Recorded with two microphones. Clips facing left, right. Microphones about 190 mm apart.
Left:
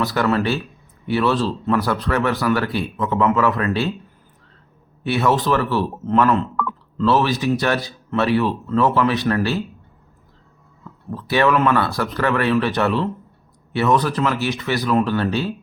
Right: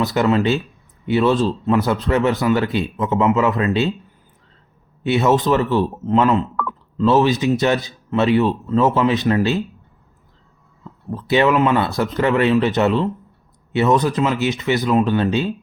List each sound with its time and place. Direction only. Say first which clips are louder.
0.0 s speech: right 2 dB; 20° right (ahead or behind)
5.0 s speech: right 3 dB; 20° right (ahead or behind)
11.1 s speech: right 2 dB; 20° right (ahead or behind)